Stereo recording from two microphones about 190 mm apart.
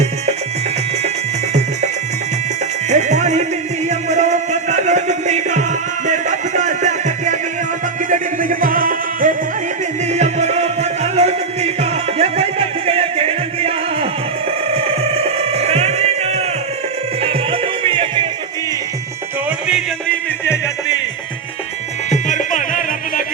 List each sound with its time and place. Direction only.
2.9 s music: 40° right (ahead or behind)
19.5 s music: 5° right (ahead or behind)
22.1 s music: 40° left (ahead or behind)